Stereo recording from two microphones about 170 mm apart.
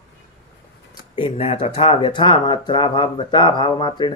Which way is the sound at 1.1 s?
30° left (ahead or behind).